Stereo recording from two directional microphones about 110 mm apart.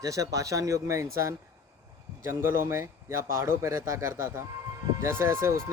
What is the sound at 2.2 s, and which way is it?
A man's voice, 20° right (ahead or behind).